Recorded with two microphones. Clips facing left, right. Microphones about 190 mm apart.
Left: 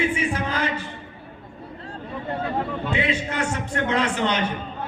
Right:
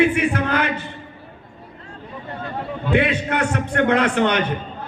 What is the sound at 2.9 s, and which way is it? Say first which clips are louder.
A man's voice: right 9 dB; 60° right (ahead or behind).